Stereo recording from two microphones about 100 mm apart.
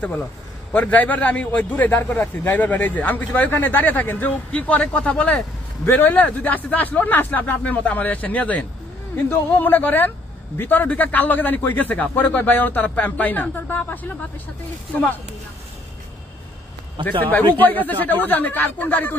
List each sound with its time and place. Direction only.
0.7 s a man's voice: 15° left (ahead or behind)
17.2 s a man's voice: 15° left (ahead or behind)